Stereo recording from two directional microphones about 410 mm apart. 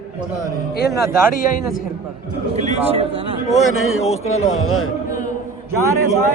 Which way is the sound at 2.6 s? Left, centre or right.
Centre.